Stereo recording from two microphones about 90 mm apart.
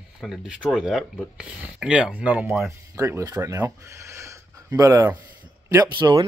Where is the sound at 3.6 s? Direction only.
35° right (ahead or behind).